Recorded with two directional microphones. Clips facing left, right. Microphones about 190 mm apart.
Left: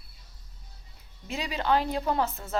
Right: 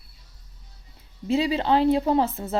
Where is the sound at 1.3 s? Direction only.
30° right (ahead or behind).